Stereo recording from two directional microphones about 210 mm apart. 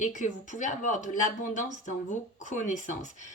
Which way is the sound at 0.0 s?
35° left (ahead or behind).